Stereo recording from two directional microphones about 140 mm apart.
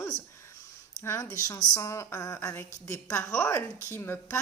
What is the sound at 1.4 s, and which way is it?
A woman's voice, 25° left (ahead or behind).